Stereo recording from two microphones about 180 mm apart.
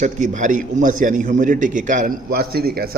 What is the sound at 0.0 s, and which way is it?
A man's voice, 45° right (ahead or behind).